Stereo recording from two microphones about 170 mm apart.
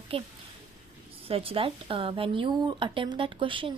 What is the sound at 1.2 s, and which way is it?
A woman's voice, 35° right (ahead or behind).